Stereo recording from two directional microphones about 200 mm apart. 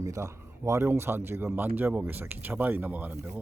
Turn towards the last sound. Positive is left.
turn(degrees=-10)  # may be behind; listen again after turning